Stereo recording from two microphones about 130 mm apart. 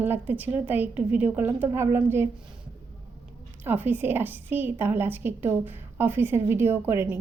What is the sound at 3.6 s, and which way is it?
A woman's voice, 15° right (ahead or behind).